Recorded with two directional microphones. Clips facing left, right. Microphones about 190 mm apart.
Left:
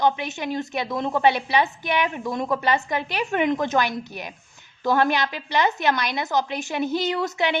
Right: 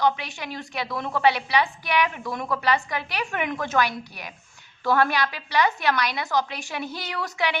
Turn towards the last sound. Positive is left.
turn(degrees=25)  # may be behind; listen again after turning